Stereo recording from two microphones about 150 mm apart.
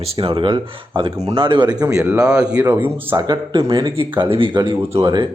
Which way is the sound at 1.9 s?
10° right (ahead or behind).